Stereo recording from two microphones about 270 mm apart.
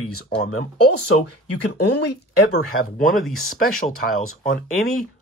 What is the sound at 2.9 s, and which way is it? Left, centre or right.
Speech, left.